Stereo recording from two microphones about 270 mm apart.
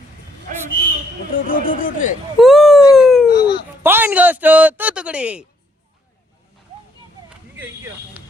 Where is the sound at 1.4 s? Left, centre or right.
Left.